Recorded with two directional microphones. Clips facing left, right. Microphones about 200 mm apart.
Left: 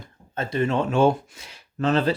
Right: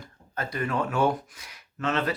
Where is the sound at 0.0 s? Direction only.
25° left (ahead or behind).